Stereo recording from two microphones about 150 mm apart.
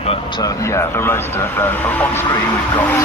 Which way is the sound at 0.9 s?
15° left (ahead or behind).